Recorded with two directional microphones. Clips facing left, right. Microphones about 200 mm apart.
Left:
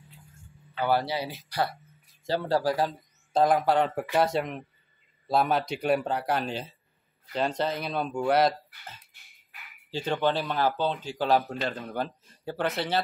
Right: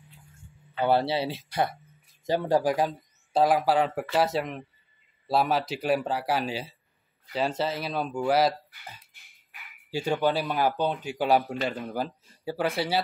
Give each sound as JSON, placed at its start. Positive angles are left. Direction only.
{"t": 0.7, "sound": "speech", "side_deg": -25}